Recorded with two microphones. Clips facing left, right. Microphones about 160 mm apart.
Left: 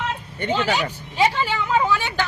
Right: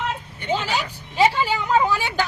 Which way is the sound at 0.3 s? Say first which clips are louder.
Left 3 dB; 60° left (ahead or behind).